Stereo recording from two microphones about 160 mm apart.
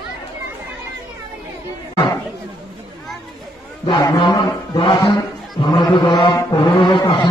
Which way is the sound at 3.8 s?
30° left (ahead or behind).